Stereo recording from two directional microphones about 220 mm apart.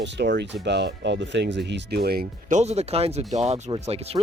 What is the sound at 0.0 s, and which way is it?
Speech, 50° right (ahead or behind).